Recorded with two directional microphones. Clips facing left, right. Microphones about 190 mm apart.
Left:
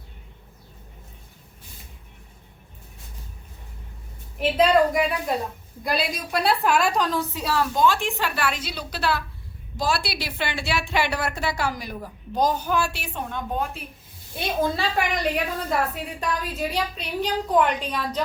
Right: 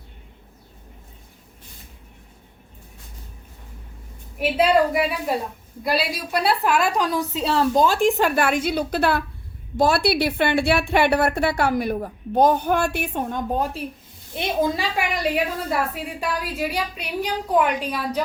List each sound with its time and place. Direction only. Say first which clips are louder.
4.4 s a woman's voice: even; 10° right (ahead or behind); by 13.8 s 40° right (ahead or behind)
14.3 s a woman's voice: right 2 dB; 20° right (ahead or behind)